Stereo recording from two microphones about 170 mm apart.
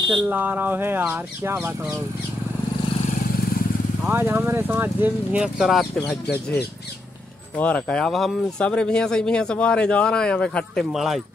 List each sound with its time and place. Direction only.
0.1 s speech: 10° right (ahead or behind)
4.0 s speech: 10° right (ahead or behind)